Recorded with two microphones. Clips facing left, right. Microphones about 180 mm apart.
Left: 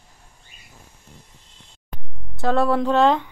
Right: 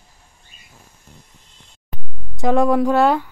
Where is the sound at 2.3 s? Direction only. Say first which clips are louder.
Right 3 dB; 15° right (ahead or behind).